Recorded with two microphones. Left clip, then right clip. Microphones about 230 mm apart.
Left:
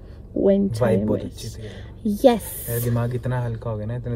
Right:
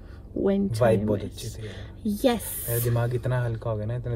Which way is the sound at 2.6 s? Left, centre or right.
Right.